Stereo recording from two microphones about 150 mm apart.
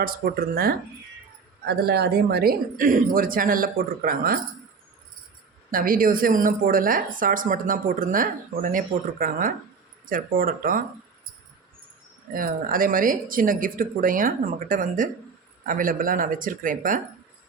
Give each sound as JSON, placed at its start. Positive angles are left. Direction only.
{"t": 0.0, "sound": "speech", "side_deg": -75}
{"t": 1.6, "sound": "speech", "side_deg": -90}
{"t": 5.7, "sound": "a woman's voice", "side_deg": -70}
{"t": 12.3, "sound": "a woman's voice", "side_deg": -70}